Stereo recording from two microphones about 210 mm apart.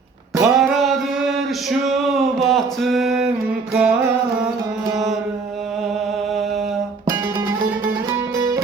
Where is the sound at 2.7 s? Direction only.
Centre (ahead or behind).